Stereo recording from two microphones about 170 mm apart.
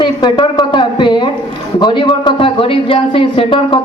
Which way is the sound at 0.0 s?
25° left (ahead or behind).